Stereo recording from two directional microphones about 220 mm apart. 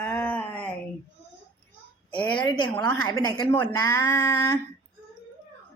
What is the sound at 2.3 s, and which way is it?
A woman's voice, 20° left (ahead or behind).